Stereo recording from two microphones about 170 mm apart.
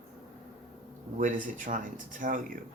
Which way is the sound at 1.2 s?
50° right (ahead or behind).